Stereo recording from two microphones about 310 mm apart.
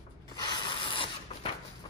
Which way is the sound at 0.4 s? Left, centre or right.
Centre.